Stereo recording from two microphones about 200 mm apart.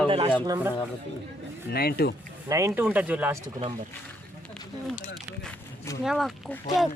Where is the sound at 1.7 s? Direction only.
50° left (ahead or behind).